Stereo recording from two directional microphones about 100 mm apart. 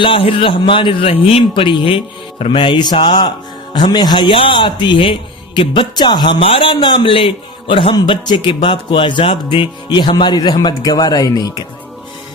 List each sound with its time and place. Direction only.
0.0 s a man's voice: 60° left (ahead or behind)
6.4 s a man's voice: 65° left (ahead or behind)
7.9 s speech: 50° left (ahead or behind)